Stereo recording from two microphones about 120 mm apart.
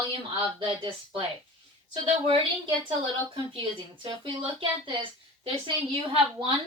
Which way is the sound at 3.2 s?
45° right (ahead or behind).